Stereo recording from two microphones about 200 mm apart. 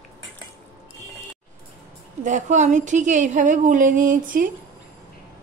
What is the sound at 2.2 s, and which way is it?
A woman's voice, 35° right (ahead or behind).